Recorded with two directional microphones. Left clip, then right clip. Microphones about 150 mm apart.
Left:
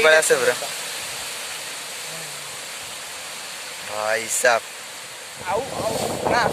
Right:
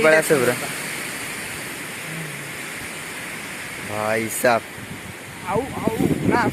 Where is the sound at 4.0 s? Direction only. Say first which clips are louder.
Even; 5° left (ahead or behind).